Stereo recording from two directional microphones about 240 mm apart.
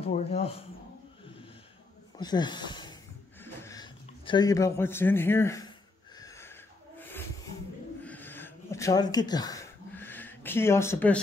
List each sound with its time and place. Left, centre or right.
0.0 s speech: left
2.1 s speech: centre
6.1 s a sound: centre